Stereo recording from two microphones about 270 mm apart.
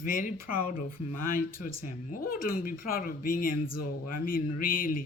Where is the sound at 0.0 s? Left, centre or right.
Left.